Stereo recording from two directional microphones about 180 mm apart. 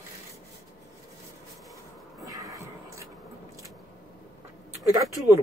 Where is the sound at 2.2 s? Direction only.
20° right (ahead or behind).